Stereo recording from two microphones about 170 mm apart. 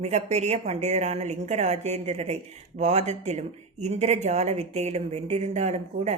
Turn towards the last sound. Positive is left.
turn(degrees=-40)  # may be behind; listen again after turning